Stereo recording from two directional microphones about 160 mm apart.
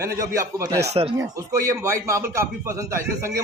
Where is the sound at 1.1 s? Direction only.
20° right (ahead or behind).